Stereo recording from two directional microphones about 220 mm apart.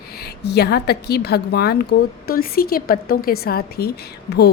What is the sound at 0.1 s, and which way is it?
A woman's voice, 45° left (ahead or behind).